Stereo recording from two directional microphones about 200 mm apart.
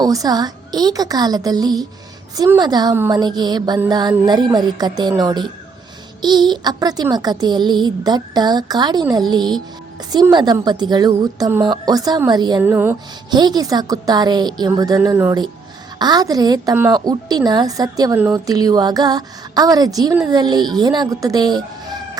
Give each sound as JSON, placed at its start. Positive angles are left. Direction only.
{"t": 0.0, "sound": "a woman's voice", "side_deg": -20}